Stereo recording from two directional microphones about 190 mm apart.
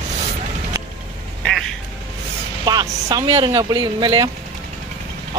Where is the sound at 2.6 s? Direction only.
20° right (ahead or behind).